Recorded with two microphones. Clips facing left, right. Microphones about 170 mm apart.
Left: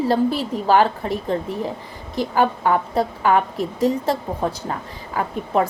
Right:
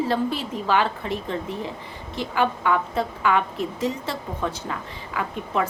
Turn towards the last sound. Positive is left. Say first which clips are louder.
# left 5 dB
turn(degrees=40)  # may be behind; listen again after turning